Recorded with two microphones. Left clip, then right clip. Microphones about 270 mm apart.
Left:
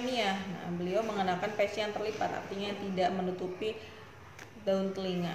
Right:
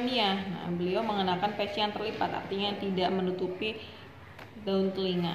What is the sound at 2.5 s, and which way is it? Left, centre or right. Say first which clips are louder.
Speech: right 4 dB; left.